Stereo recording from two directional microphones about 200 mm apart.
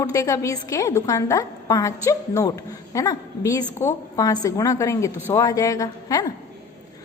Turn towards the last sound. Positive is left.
turn(degrees=20)  # may be behind; listen again after turning